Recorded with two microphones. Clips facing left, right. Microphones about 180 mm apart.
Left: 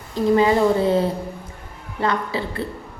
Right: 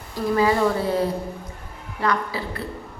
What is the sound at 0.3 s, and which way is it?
Speech, 25° left (ahead or behind).